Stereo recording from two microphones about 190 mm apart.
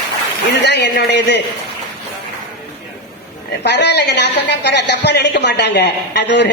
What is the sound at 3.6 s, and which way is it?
A woman's voice, 65° left (ahead or behind).